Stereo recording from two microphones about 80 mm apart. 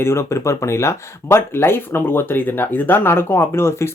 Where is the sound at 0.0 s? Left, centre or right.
Left.